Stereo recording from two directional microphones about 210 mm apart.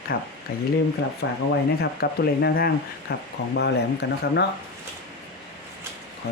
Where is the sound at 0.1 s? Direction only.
50° left (ahead or behind).